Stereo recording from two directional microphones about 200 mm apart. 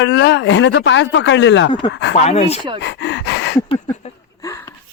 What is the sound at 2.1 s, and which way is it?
Speech, 30° left (ahead or behind).